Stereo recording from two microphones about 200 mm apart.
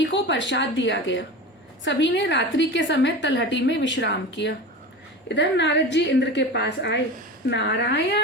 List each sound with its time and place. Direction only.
0.0 s a woman's voice: 65° left (ahead or behind)